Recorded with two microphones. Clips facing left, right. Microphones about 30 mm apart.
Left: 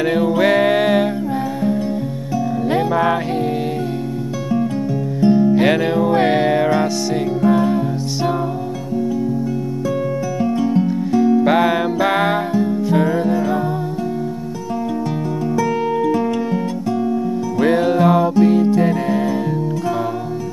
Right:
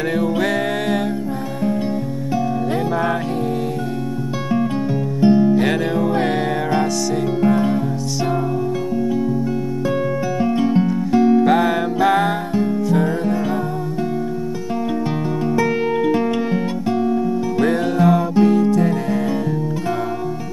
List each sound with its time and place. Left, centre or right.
0.0 s music: centre
2.7 s music: centre
5.2 s music: centre
5.5 s music: centre
7.4 s music: centre
10.4 s music: right
11.4 s music: centre
15.5 s music: right
16.9 s guitar: centre
17.6 s music: centre